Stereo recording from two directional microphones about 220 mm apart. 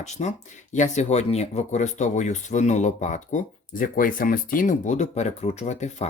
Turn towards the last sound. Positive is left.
turn(degrees=30)  # may be behind; listen again after turning